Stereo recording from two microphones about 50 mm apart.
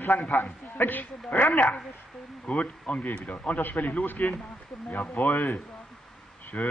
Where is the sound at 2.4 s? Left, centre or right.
Left.